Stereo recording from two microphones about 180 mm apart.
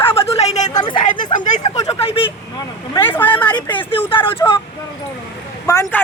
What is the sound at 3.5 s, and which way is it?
Speech, 25° left (ahead or behind).